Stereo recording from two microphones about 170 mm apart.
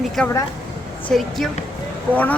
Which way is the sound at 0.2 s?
5° left (ahead or behind).